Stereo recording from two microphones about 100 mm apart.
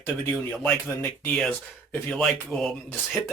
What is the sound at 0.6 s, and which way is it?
Speech, 20° left (ahead or behind).